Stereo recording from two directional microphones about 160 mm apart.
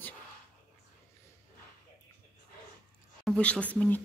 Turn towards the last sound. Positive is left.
turn(degrees=10)  # may be behind; listen again after turning